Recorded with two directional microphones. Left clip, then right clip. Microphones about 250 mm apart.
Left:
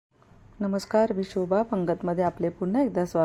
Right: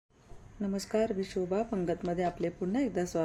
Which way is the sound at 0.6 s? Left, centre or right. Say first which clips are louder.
Left 8 dB; centre.